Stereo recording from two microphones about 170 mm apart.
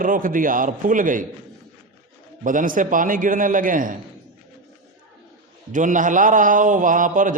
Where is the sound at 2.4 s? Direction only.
50° right (ahead or behind).